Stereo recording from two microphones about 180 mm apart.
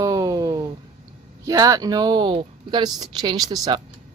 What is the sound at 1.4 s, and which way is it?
Speech, 20° right (ahead or behind).